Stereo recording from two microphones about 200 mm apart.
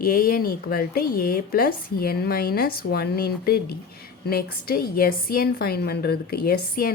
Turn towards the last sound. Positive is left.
turn(degrees=50)  # may be behind; listen again after turning